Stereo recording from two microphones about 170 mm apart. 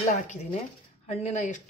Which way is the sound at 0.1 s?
40° left (ahead or behind).